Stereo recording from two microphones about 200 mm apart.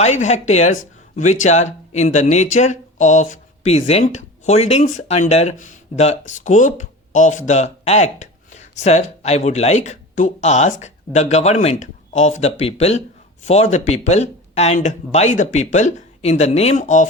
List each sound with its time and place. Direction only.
0.0 s speech: 35° left (ahead or behind)